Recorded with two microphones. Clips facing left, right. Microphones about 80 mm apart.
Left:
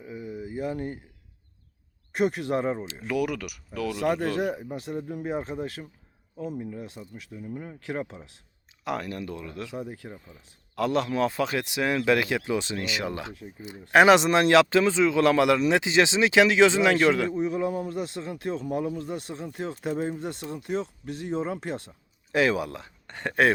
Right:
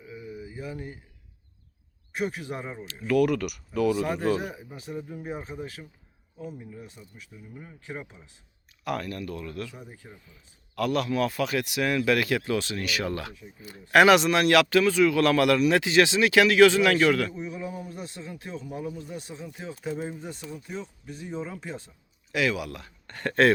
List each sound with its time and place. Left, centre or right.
0.2 s a sound: left
2.1 s a man's voice: left
2.7 s speech: left
3.2 s speech: centre
4.5 s a man's voice: left
7.4 s speech: left
7.9 s speech: left
8.8 s speech: left
9.7 s speech: left
10.1 s speech: left
10.8 s speech: left
17.4 s a man's voice: left
22.3 s speech: left; by 23.5 s centre